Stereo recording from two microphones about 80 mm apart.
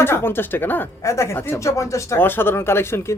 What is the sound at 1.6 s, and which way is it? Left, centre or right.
Speech, left.